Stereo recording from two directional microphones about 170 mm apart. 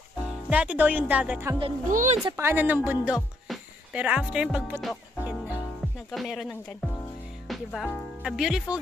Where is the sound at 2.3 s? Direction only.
15° right (ahead or behind).